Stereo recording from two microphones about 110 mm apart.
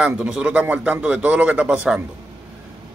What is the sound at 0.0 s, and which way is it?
A man's voice, 10° right (ahead or behind).